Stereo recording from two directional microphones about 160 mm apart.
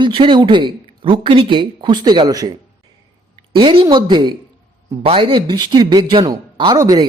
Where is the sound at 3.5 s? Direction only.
30° right (ahead or behind).